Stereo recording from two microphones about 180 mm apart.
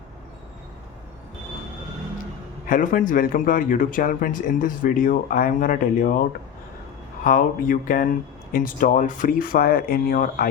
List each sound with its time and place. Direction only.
2.6 s a man's voice: 50° left (ahead or behind)
7.3 s a man's voice: 50° left (ahead or behind)